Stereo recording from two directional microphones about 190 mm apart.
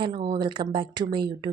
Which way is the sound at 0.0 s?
25° right (ahead or behind).